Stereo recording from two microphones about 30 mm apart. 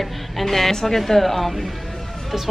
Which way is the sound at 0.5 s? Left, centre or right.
Centre.